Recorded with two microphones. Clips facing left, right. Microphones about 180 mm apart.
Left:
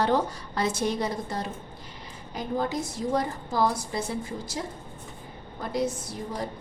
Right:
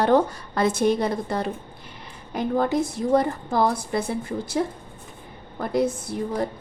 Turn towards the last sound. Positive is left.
turn(degrees=-55)  # may be behind; listen again after turning